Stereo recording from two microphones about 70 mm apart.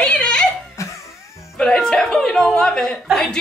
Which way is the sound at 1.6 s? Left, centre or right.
Centre.